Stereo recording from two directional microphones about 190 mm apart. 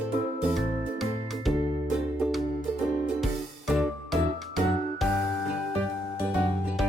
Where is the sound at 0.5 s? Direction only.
Centre (ahead or behind).